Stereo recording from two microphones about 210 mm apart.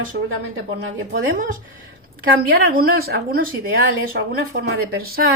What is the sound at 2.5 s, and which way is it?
Speech, 45° right (ahead or behind).